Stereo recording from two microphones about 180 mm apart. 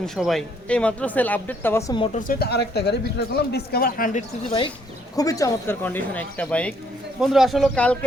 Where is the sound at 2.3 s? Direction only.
60° left (ahead or behind); by 4.7 s 35° left (ahead or behind).